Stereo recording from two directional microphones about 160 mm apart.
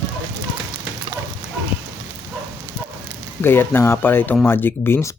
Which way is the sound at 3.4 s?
15° left (ahead or behind).